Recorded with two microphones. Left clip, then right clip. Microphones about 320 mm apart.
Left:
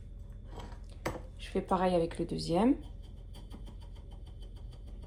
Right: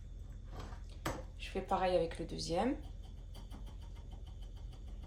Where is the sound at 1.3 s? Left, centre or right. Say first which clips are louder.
Left 5 dB; left.